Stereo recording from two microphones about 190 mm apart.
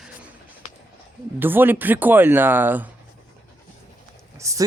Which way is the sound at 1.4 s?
10° right (ahead or behind).